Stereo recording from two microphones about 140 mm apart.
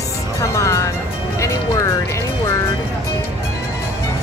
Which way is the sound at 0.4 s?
20° left (ahead or behind).